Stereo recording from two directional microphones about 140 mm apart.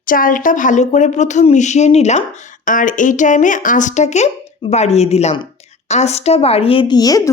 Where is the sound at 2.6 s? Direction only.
70° left (ahead or behind); by 7.0 s 40° left (ahead or behind).